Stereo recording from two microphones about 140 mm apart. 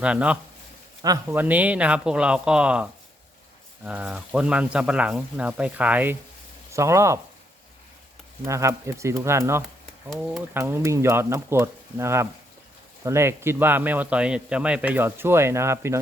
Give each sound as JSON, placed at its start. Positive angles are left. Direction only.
{"t": 0.0, "sound": "a man's voice", "side_deg": -10}
{"t": 1.0, "sound": "speech", "side_deg": -25}
{"t": 1.4, "sound": "a man's voice", "side_deg": -10}
{"t": 8.4, "sound": "speech", "side_deg": -20}
{"t": 10.1, "sound": "speech", "side_deg": 0}
{"t": 10.5, "sound": "a man's voice", "side_deg": -15}